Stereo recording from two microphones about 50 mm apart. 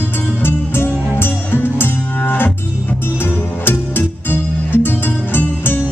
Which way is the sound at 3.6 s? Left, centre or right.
Left.